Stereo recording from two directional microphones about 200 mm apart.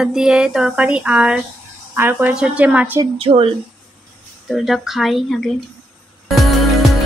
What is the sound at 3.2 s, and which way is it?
Speech, 30° right (ahead or behind).